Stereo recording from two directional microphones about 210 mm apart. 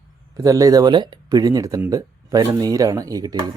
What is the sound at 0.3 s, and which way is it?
Speech, 15° right (ahead or behind).